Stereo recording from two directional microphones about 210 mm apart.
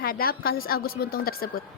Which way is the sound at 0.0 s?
45° left (ahead or behind).